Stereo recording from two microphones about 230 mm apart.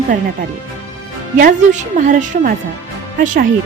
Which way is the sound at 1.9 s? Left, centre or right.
Right.